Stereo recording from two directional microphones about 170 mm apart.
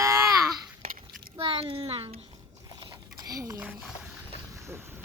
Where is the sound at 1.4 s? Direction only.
35° right (ahead or behind).